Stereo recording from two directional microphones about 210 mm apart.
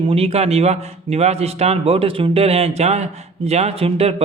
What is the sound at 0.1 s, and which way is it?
A man's voice, 30° right (ahead or behind).